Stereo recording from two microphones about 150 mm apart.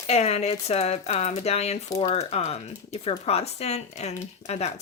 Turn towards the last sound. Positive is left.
turn(degrees=45)  # may be behind; listen again after turning